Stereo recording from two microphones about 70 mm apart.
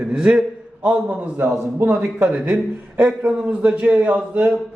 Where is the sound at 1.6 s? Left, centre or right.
Right.